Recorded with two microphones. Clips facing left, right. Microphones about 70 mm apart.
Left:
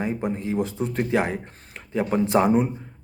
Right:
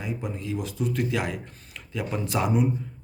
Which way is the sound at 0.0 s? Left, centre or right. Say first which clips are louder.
Left 6 dB; left.